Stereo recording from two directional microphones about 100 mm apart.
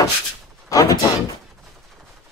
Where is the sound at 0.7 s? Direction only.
35° left (ahead or behind).